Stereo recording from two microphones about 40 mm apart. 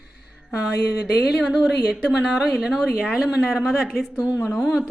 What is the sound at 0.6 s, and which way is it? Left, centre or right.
Speech, right.